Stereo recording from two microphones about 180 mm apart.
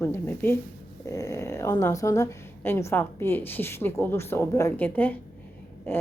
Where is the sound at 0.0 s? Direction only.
15° left (ahead or behind).